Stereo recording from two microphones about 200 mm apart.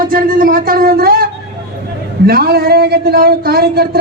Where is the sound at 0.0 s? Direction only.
45° right (ahead or behind).